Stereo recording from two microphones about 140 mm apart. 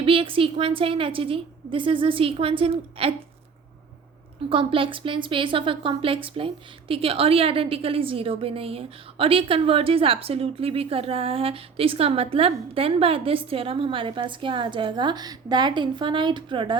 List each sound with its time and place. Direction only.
0.0 s a woman's voice: 40° right (ahead or behind)
4.4 s a woman's voice: 40° right (ahead or behind)